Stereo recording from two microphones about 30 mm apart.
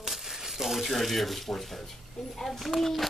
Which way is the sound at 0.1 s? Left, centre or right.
Centre.